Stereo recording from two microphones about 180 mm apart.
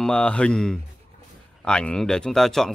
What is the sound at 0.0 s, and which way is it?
Speech, 5° left (ahead or behind).